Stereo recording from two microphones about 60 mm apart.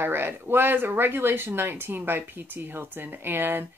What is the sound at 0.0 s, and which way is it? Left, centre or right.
A woman's voice, right.